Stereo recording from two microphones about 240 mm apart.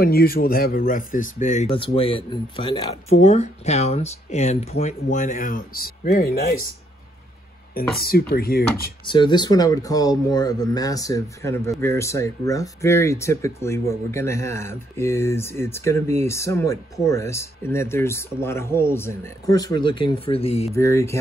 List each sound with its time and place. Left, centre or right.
0.0 s speech: left
7.7 s speech: left
9.0 s speech: centre
20.7 s speech: centre